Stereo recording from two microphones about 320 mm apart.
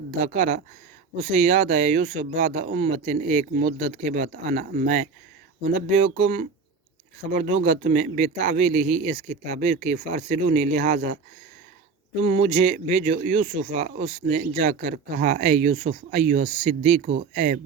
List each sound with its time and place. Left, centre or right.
0.2 s speech: right
6.1 s speech: right
12.2 s speech: centre